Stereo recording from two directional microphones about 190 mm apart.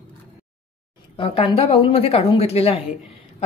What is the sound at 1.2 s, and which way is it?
A woman's voice, 30° left (ahead or behind).